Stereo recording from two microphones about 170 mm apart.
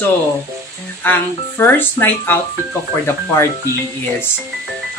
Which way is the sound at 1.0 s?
10° left (ahead or behind).